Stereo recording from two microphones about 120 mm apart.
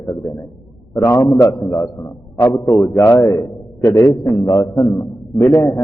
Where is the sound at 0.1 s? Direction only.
30° left (ahead or behind).